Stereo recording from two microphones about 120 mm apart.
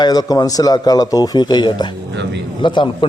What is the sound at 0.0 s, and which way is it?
Speech, 35° left (ahead or behind).